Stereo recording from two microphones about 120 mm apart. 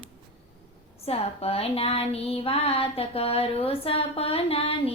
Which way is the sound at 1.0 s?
55° left (ahead or behind).